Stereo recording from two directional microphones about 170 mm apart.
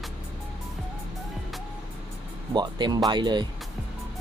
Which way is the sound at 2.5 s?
25° right (ahead or behind).